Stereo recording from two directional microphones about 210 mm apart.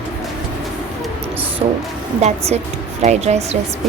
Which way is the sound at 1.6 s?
25° right (ahead or behind).